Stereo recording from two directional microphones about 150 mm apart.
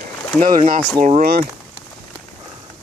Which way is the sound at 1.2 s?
90° right.